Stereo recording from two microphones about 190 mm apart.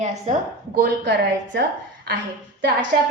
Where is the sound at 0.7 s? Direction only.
60° right (ahead or behind).